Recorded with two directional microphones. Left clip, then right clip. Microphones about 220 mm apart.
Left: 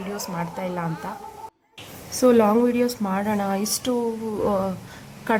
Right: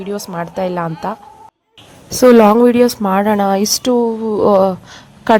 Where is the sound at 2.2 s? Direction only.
35° right (ahead or behind).